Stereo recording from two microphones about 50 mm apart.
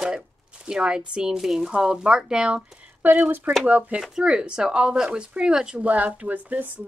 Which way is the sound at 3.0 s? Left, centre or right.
Right.